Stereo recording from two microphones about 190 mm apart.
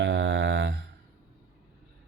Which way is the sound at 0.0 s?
75° right (ahead or behind).